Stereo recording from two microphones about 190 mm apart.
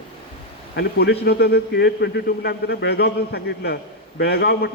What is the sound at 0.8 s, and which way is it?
A man's voice, 60° left (ahead or behind).